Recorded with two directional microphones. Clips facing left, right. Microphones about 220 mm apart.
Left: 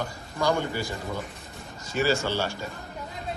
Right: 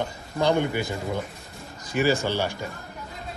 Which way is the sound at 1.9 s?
15° right (ahead or behind).